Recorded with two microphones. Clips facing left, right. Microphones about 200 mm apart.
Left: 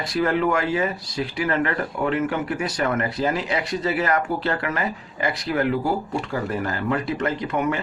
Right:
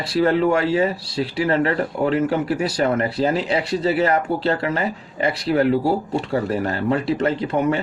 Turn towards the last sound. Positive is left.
turn(degrees=-35)  # may be behind; listen again after turning